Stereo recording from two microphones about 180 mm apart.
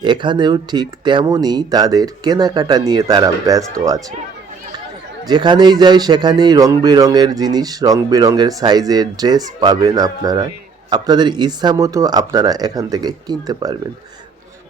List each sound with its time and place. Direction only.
0.0 s speech: 25° right (ahead or behind)
5.2 s speech: 25° right (ahead or behind)